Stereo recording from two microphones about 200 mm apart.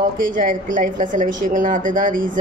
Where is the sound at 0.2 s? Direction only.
45° right (ahead or behind).